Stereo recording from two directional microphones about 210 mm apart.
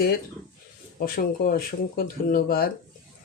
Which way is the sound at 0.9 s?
45° left (ahead or behind).